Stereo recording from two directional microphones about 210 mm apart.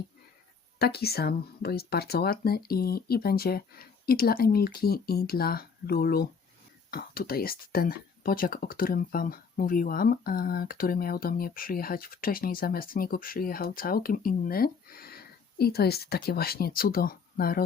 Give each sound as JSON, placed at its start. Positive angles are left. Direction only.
{"t": 0.8, "sound": "speech", "side_deg": 50}